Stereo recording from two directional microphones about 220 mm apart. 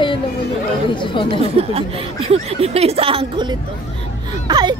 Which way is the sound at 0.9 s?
20° left (ahead or behind).